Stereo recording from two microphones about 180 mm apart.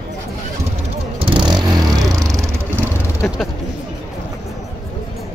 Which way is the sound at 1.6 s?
20° right (ahead or behind).